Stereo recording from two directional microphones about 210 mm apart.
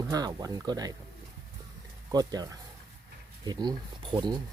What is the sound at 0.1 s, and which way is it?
Speech, 20° right (ahead or behind).